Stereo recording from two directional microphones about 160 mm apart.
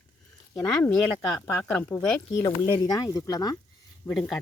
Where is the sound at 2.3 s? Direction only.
25° left (ahead or behind).